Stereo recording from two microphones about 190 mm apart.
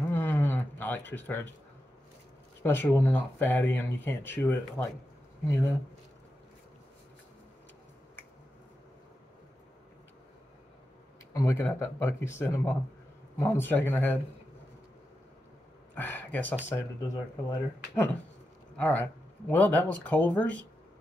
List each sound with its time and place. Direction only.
0.1 s a sound: 10° left (ahead or behind)
2.6 s speech: 10° left (ahead or behind)
11.3 s speech: 15° left (ahead or behind)
15.9 s speech: 10° left (ahead or behind)